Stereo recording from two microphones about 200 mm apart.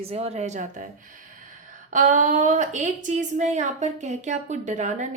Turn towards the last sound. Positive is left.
turn(degrees=-35)  # may be behind; listen again after turning